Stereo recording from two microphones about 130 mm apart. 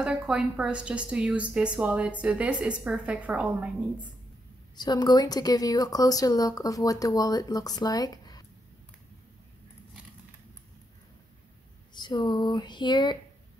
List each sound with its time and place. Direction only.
0.0 s a woman's voice: 5° right (ahead or behind)
4.7 s speech: 35° left (ahead or behind)
11.9 s speech: 35° left (ahead or behind)